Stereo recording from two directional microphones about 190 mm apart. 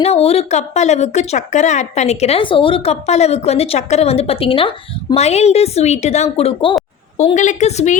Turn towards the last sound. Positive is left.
turn(degrees=40)  # may be behind; listen again after turning